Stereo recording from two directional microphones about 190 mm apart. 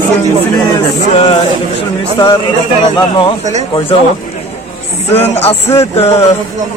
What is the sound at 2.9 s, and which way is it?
Speech, 25° left (ahead or behind).